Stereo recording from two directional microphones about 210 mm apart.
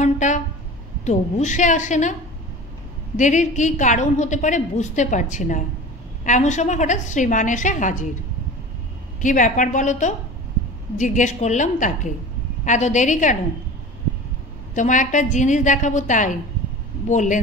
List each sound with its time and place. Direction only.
0.0 s a sound: 35° left (ahead or behind)
1.0 s a woman's voice: 35° left (ahead or behind)
3.2 s a woman's voice: 35° left (ahead or behind)
9.2 s a woman's voice: 40° left (ahead or behind)
14.7 s a woman's voice: 35° left (ahead or behind)